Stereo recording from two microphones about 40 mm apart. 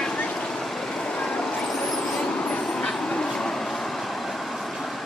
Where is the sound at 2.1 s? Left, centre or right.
Left.